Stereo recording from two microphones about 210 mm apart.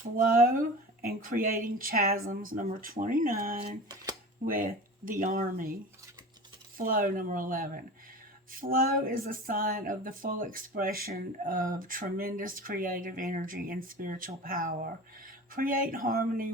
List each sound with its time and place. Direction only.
0.0 s speech: 40° right (ahead or behind)
3.6 s speech: 20° right (ahead or behind)
4.4 s speech: 40° right (ahead or behind)
6.7 s speech: 40° right (ahead or behind)